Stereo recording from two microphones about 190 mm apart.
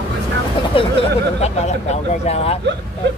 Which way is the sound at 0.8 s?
30° left (ahead or behind).